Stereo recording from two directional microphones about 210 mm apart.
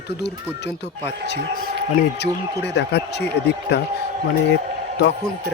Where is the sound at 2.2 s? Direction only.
55° left (ahead or behind).